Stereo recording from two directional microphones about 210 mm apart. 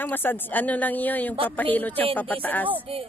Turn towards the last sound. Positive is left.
turn(degrees=-25)  # may be behind; listen again after turning